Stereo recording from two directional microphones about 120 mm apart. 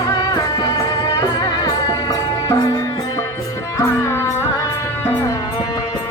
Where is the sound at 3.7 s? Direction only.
25° left (ahead or behind).